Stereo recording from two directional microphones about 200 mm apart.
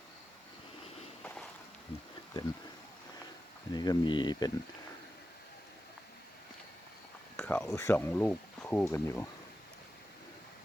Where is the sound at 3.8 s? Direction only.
20° left (ahead or behind).